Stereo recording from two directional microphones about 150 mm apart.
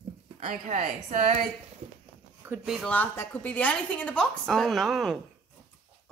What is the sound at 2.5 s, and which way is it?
Speech, 5° right (ahead or behind).